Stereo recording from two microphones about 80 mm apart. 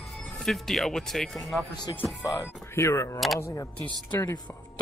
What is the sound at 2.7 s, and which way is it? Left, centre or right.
Speech, left.